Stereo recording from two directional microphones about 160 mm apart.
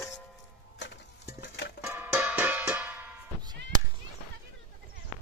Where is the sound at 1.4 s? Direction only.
90° left.